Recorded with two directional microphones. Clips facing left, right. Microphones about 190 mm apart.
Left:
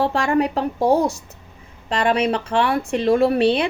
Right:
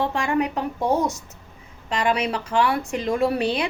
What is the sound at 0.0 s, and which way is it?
A woman's voice, 35° left (ahead or behind).